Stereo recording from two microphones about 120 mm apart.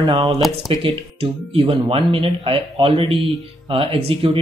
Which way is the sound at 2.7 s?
35° right (ahead or behind).